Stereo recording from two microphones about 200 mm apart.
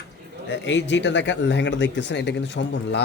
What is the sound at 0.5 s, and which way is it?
A man's voice, 65° left (ahead or behind).